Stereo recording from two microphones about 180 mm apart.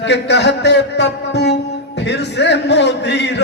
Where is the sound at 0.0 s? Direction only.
70° left (ahead or behind).